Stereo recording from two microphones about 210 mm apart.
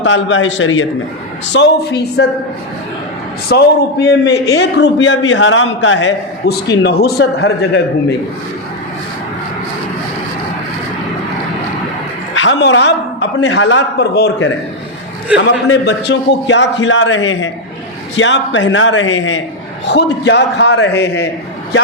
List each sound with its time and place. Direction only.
0.0 s a man's voice: 60° left (ahead or behind)
1.5 s a woman's voice: 55° left (ahead or behind)
3.5 s a man's voice: 50° left (ahead or behind)
12.3 s a man's voice: 65° left (ahead or behind)
15.6 s a man's voice: 55° left (ahead or behind)
19.9 s a man's voice: 55° left (ahead or behind)